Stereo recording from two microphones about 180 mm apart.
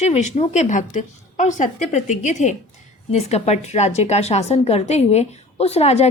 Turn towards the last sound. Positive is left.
turn(degrees=35)  # may be behind; listen again after turning